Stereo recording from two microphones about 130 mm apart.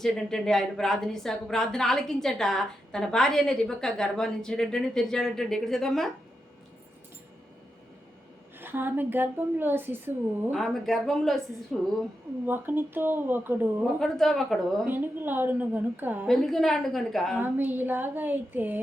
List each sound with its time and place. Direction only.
0.0 s speech: 5° left (ahead or behind)
8.5 s a woman's voice: 15° right (ahead or behind)
10.5 s speech: centre (ahead or behind)
12.5 s a woman's voice: 15° right (ahead or behind)
14.0 s speech: centre (ahead or behind)
14.8 s a woman's voice: 15° right (ahead or behind)
16.2 s speech: centre (ahead or behind)
17.3 s a woman's voice: 15° right (ahead or behind)